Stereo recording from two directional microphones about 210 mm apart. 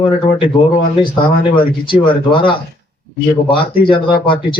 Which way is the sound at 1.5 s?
25° left (ahead or behind).